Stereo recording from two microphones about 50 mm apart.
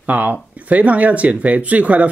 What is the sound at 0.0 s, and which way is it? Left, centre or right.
Speech, right.